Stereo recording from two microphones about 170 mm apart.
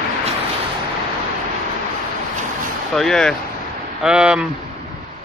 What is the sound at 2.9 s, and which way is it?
Speech, 5° left (ahead or behind).